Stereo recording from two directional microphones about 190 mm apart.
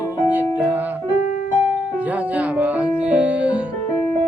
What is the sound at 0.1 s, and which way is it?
Music, 10° right (ahead or behind).